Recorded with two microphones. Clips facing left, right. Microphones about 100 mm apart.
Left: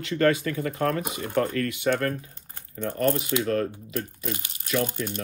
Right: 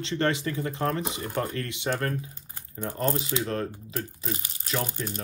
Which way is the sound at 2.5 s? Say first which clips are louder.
Left 4 dB; 15° right (ahead or behind).